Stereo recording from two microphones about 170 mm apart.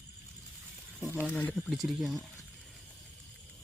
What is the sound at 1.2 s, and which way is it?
Speech, 5° left (ahead or behind).